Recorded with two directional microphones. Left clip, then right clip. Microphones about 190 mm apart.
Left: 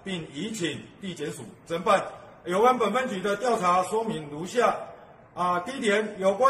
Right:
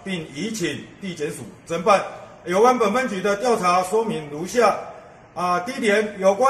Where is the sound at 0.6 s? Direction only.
15° right (ahead or behind).